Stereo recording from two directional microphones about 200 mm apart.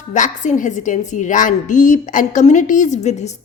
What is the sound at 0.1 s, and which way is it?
A woman's voice, 40° left (ahead or behind).